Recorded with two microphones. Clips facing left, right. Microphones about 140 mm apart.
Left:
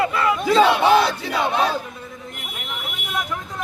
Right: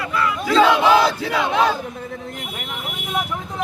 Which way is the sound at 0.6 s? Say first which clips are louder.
Right 2 dB; 90° right.